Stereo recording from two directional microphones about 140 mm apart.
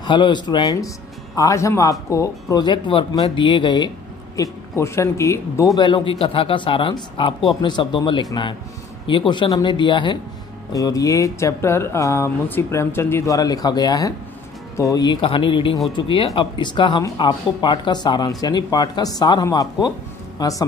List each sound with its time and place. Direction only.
0.0 s speech: 35° left (ahead or behind)
4.4 s speech: 20° left (ahead or behind)
5.8 s speech: 35° left (ahead or behind)
10.7 s speech: 25° left (ahead or behind)